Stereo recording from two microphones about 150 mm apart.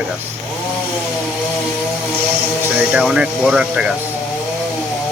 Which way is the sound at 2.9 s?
5° right (ahead or behind).